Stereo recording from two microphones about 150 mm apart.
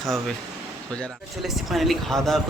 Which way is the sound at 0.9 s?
Centre (ahead or behind).